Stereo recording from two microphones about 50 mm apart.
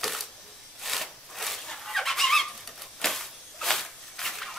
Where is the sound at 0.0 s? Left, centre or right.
Centre.